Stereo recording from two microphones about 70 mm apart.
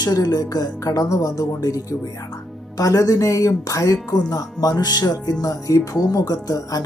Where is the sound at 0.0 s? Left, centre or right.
Left.